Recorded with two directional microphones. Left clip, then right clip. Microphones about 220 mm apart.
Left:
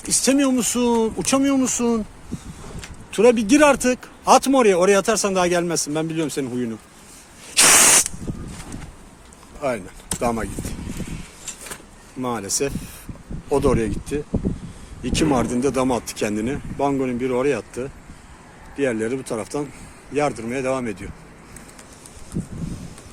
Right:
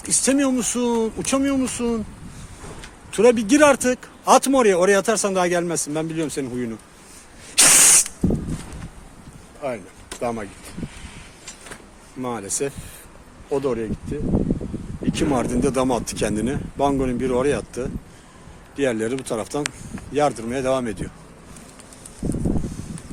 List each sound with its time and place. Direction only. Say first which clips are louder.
0.0 s speech: left 1 dB; 5° left (ahead or behind)
3.1 s speech: left 1 dB; 5° left (ahead or behind)
7.5 s rodents: left 1 dB; 15° left (ahead or behind)
9.6 s speech: left 4 dB; 20° left (ahead or behind)
12.2 s speech: left 2 dB; 10° left (ahead or behind)
13.5 s speech: left 4 dB; 25° left (ahead or behind)
15.0 s speech: left 2 dB; 15° left (ahead or behind); by 21.1 s centre (ahead or behind)